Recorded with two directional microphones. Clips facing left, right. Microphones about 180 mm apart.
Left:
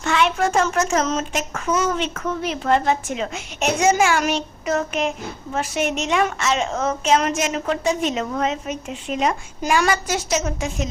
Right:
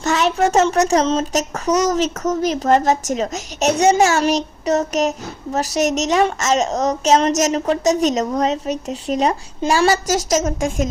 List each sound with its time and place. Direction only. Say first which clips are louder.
0.0 s speech: right 3 dB; 40° right (ahead or behind)